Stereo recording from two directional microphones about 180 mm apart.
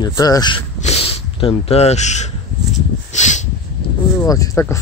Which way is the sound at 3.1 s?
40° left (ahead or behind).